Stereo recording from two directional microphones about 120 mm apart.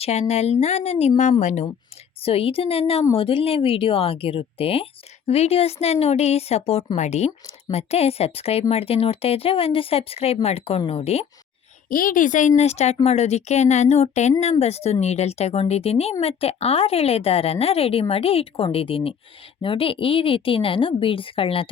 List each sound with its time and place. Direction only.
0.0 s speech: 65° left (ahead or behind)
2.2 s a woman's voice: 50° left (ahead or behind)
6.9 s speech: 75° left (ahead or behind)
12.1 s a woman's voice: 90° left; by 21.7 s 50° left (ahead or behind)